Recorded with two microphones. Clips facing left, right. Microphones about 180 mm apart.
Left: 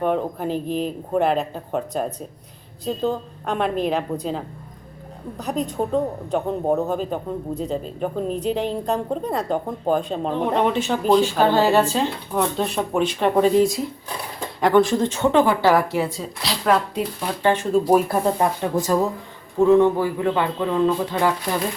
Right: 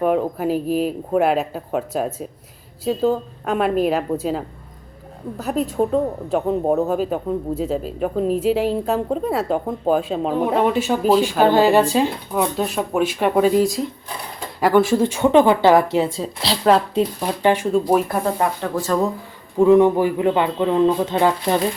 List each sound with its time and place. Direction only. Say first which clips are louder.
0.0 s speech: right 3 dB; 5° right (ahead or behind); by 17.1 s 30° right (ahead or behind)
17.2 s speech: right 2 dB; 15° right (ahead or behind)
17.7 s speech: even; 10° left (ahead or behind)
19.5 s speech: right 2 dB; 15° right (ahead or behind)